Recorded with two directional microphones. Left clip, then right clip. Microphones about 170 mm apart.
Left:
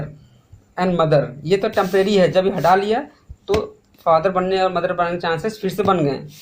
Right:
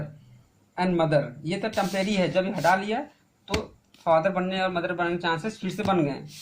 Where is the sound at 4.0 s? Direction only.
50° left (ahead or behind).